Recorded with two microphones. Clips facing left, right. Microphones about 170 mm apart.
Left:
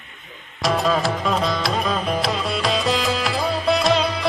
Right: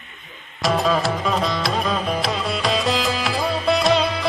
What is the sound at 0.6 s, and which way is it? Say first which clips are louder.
Music: even; centre (ahead or behind).